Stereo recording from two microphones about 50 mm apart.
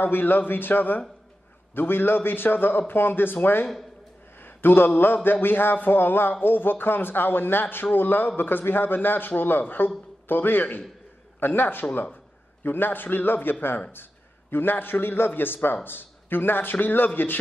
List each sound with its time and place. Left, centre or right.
0.0 s a man's voice: left
4.6 s a man's voice: left